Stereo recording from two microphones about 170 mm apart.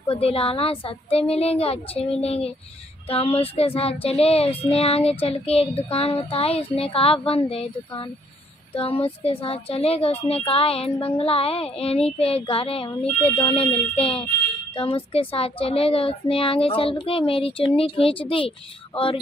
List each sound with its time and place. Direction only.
0.1 s speech: 35° left (ahead or behind)